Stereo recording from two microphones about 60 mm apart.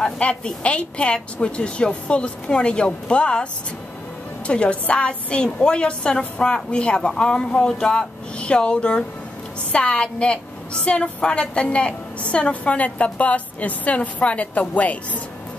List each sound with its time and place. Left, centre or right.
0.0 s a woman's voice: centre
4.5 s a woman's voice: centre